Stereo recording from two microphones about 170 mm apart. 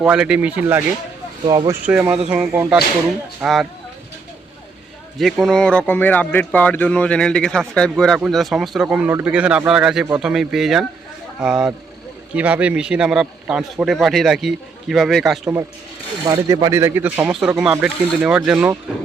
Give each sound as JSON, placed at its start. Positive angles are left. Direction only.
{"t": 0.0, "sound": "speech", "side_deg": -5}
{"t": 1.5, "sound": "speech", "side_deg": -20}
{"t": 1.8, "sound": "a man's voice", "side_deg": -5}
{"t": 5.1, "sound": "a man's voice", "side_deg": 0}
{"t": 16.2, "sound": "a man's voice", "side_deg": -20}